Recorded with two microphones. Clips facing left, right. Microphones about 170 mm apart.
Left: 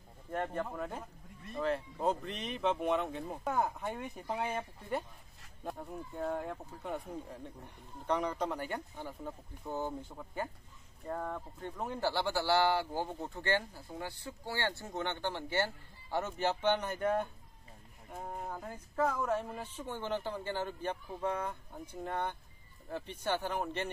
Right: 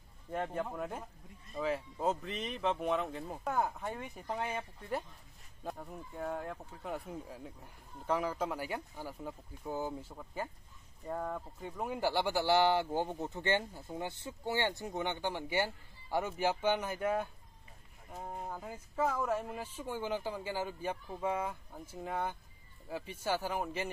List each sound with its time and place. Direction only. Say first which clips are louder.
0.3 s speech: even; 5° right (ahead or behind)